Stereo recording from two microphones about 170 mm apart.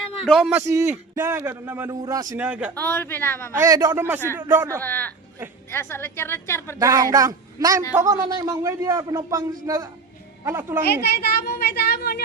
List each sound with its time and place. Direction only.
0.3 s a man's voice: centre (ahead or behind)
0.9 s a man's voice: 10° right (ahead or behind)
2.3 s a man's voice: 10° right (ahead or behind)
2.7 s a woman's voice: 10° left (ahead or behind)
3.6 s a man's voice: 20° right (ahead or behind)
4.8 s a woman's voice: 10° left (ahead or behind)
6.7 s a man's voice: 20° right (ahead or behind)
11.1 s speech: 65° left (ahead or behind)